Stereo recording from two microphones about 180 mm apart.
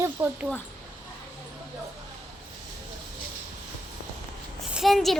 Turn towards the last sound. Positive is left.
turn(degrees=0)  # may be behind; listen again after turning